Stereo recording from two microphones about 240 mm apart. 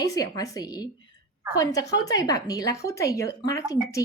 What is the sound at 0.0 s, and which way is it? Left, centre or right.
A woman's voice, centre.